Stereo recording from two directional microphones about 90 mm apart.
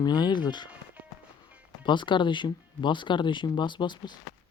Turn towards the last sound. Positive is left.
turn(degrees=60)  # may be behind; listen again after turning